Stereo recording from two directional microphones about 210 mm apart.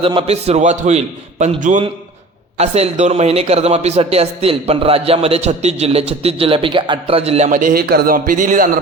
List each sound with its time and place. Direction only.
0.0 s a man's voice: 25° right (ahead or behind)